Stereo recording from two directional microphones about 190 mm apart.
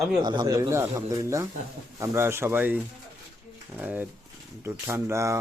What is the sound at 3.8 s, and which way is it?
Speech, 10° right (ahead or behind).